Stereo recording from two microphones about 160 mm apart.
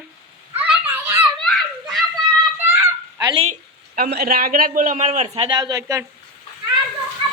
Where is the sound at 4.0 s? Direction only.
70° right (ahead or behind); by 6.0 s 20° right (ahead or behind).